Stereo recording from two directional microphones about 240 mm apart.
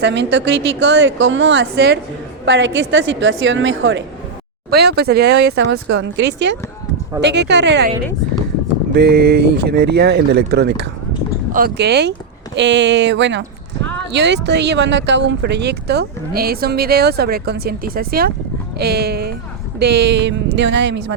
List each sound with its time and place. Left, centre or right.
0.0 s speech: right
8.9 s speech: right